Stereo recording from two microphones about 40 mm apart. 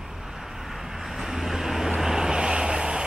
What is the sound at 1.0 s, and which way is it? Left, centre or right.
Vehicle, centre.